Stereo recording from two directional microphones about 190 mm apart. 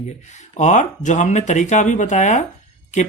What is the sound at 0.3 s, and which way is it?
Speech, 40° left (ahead or behind).